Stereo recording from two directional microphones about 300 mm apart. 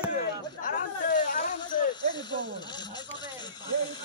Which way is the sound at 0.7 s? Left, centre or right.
Left.